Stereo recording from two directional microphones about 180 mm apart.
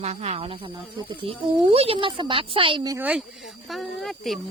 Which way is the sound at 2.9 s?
5° right (ahead or behind).